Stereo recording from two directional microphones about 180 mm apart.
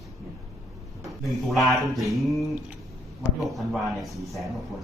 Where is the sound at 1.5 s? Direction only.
Centre (ahead or behind).